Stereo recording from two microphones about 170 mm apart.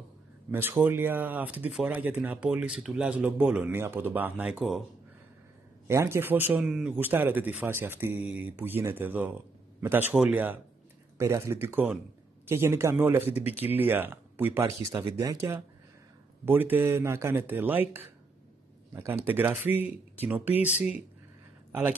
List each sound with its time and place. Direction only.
0.5 s speech: 10° right (ahead or behind)
5.9 s speech: 15° right (ahead or behind)
19.2 s speech: 10° right (ahead or behind)